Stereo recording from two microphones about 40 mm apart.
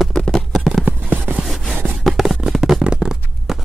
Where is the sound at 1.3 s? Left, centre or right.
Right.